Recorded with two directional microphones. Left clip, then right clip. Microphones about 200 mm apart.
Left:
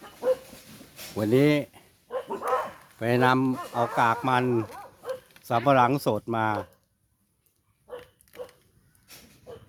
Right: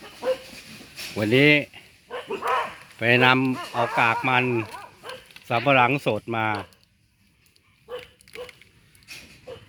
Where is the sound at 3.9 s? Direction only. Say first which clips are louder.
Right 3 dB; 10° left (ahead or behind).